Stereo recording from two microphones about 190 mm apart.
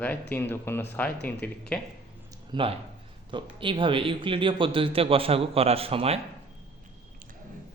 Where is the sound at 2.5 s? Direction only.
25° right (ahead or behind).